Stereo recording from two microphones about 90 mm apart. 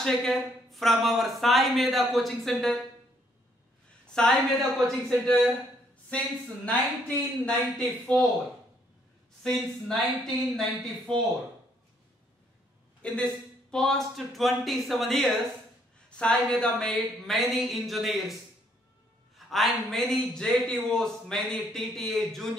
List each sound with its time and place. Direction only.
0.0 s a man's voice: 5° left (ahead or behind)
4.1 s speech: 5° left (ahead or behind)
6.0 s speech: 15° left (ahead or behind)
9.6 s a man's voice: 5° left (ahead or behind)
13.0 s a man's voice: 10° left (ahead or behind)